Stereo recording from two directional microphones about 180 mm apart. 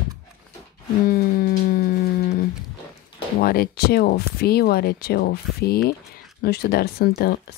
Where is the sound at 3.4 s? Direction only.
55° left (ahead or behind).